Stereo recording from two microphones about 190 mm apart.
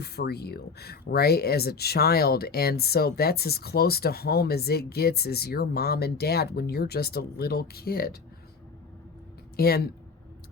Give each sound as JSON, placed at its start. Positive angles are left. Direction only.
{"t": 0.0, "sound": "speech", "side_deg": 55}
{"t": 9.6, "sound": "speech", "side_deg": 55}